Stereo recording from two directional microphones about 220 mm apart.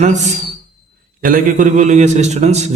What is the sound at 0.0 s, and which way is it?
A man's voice, 30° right (ahead or behind).